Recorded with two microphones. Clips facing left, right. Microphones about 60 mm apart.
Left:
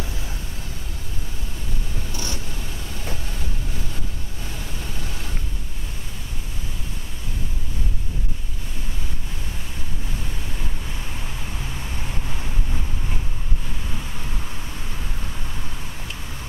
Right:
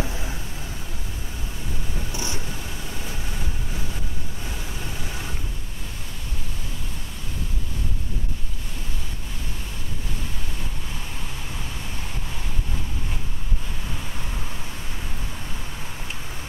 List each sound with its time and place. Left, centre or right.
0.0 s vehicle: right
2.1 s a sound: centre
4.8 s vehicle: centre